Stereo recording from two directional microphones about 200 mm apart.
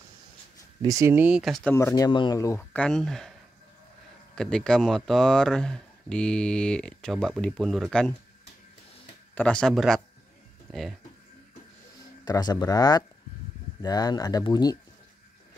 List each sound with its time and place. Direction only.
0.8 s speech: 15° right (ahead or behind); by 3.3 s centre (ahead or behind)
4.4 s speech: 5° left (ahead or behind)
9.3 s speech: 5° left (ahead or behind)
12.3 s speech: 20° left (ahead or behind)